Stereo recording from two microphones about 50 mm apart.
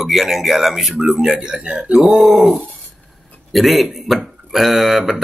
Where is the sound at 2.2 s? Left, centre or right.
Centre.